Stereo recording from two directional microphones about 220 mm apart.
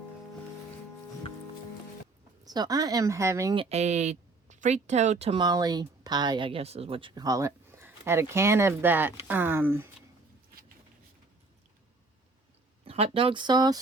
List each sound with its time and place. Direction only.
2.4 s speech: 15° right (ahead or behind)
12.8 s speech: 25° right (ahead or behind)